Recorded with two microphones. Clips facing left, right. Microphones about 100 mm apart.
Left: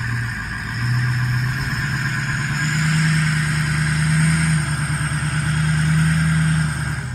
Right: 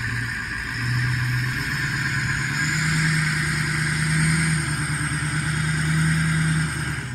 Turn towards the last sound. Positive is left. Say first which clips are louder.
# left 3 dB
turn(degrees=5)  # may be behind; listen again after turning